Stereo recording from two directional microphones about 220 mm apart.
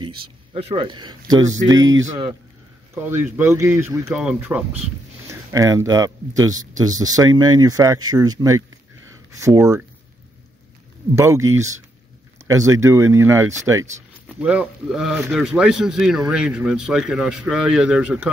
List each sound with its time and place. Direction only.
0.6 s speech: 25° right (ahead or behind)
11.1 s a man's voice: 15° right (ahead or behind)